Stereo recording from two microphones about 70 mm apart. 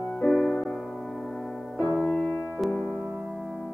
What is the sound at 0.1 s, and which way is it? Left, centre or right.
Music, centre.